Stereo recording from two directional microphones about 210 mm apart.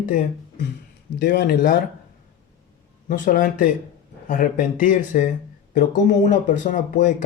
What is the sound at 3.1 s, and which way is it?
Speech, 40° left (ahead or behind).